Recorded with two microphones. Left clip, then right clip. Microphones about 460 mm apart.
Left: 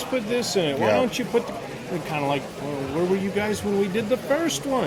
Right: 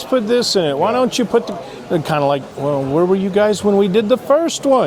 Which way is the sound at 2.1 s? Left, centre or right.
Right.